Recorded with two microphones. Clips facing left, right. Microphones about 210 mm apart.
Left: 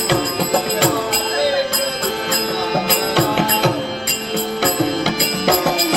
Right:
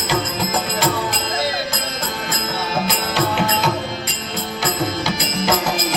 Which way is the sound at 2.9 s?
60° left (ahead or behind).